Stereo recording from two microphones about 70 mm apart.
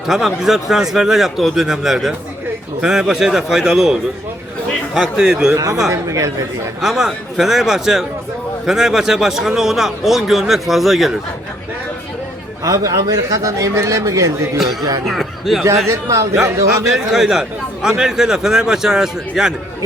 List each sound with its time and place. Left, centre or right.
0.1 s a man's voice: centre
4.9 s a man's voice: centre
5.9 s a man's voice: right
6.8 s a man's voice: centre
12.6 s a man's voice: right
14.6 s a man's voice: centre
15.9 s a man's voice: right
17.1 s a man's voice: centre